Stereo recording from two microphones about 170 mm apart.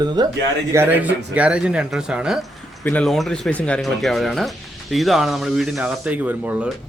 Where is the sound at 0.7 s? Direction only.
15° right (ahead or behind).